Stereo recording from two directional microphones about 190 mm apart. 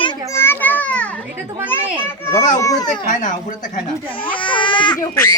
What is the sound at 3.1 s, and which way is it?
Speech, 40° left (ahead or behind).